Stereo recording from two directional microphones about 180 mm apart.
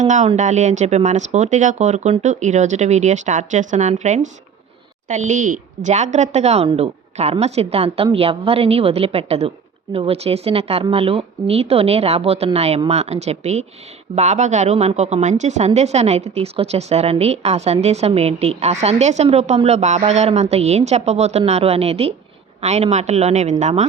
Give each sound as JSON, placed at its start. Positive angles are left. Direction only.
{"t": 0.0, "sound": "a woman's voice", "side_deg": -40}